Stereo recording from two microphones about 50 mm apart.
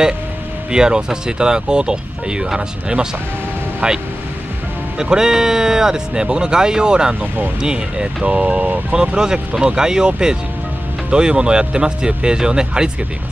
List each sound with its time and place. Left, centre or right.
0.7 s speech: centre